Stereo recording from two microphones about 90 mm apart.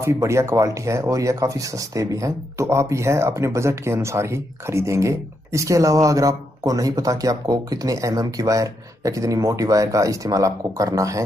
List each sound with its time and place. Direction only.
0.0 s speech: 30° right (ahead or behind)